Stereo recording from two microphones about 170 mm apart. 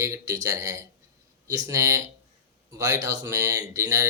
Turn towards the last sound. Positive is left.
turn(degrees=-15)  # may be behind; listen again after turning